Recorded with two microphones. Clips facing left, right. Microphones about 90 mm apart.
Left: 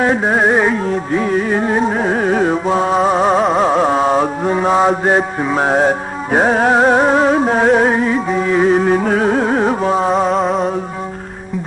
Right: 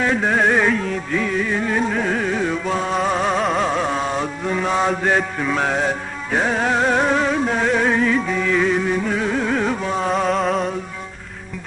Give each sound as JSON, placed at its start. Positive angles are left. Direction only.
{"t": 0.0, "sound": "music", "side_deg": 35}
{"t": 3.5, "sound": "mantra", "side_deg": 35}
{"t": 10.2, "sound": "music", "side_deg": 0}